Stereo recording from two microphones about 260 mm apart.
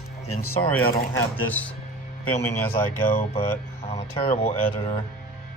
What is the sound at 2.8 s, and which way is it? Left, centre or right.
Speech, centre.